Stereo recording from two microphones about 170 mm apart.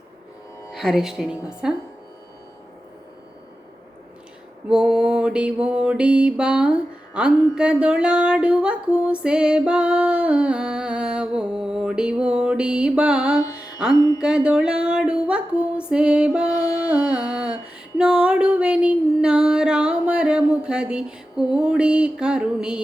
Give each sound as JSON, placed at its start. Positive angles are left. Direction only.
{"t": 0.7, "sound": "speech", "side_deg": 0}
{"t": 1.6, "sound": "mantra", "side_deg": -5}
{"t": 4.7, "sound": "mantra", "side_deg": -5}
{"t": 13.6, "sound": "music", "side_deg": -5}
{"t": 13.9, "sound": "music", "side_deg": 20}
{"t": 14.2, "sound": "music", "side_deg": -5}